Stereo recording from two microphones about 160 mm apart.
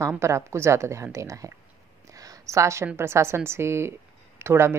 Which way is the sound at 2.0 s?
20° right (ahead or behind).